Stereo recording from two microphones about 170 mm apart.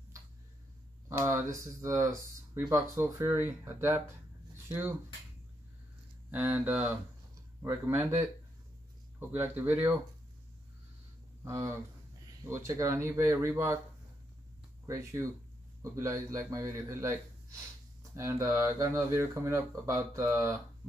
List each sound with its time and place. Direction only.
1.0 s speech: 15° right (ahead or behind)
6.3 s speech: 10° right (ahead or behind)
9.3 s speech: 10° right (ahead or behind)
11.4 s speech: 15° right (ahead or behind)
14.9 s speech: 15° right (ahead or behind)